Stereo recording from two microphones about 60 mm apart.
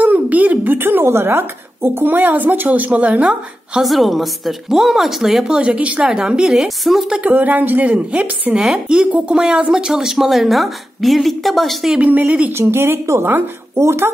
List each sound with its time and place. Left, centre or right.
0.0 s speech: right
3.8 s a woman's voice: centre
7.2 s a woman's voice: right
9.3 s a woman's voice: centre
12.0 s a woman's voice: right
12.5 s speech: right
13.0 s speech: right